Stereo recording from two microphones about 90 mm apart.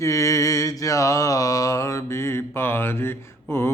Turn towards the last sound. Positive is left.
turn(degrees=30)  # may be behind; listen again after turning